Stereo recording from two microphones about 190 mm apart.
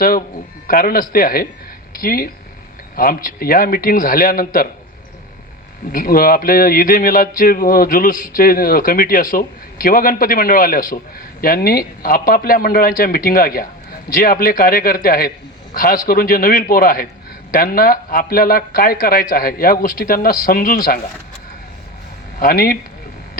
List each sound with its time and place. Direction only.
0.7 s a man's voice: 50° left (ahead or behind)
5.9 s a man's voice: 50° left (ahead or behind)
22.4 s a man's voice: 50° left (ahead or behind)